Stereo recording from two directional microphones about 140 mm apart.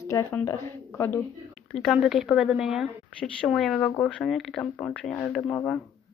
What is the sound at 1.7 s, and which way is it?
A woman's voice, centre (ahead or behind).